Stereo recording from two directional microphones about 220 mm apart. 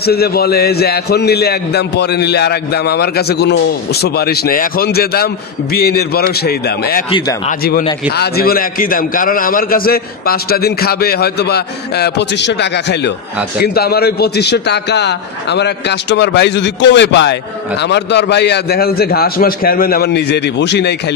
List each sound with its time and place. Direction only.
0.0 s a man's voice: 45° left (ahead or behind)
7.1 s speech: 20° left (ahead or behind)
8.2 s a man's voice: 45° left (ahead or behind)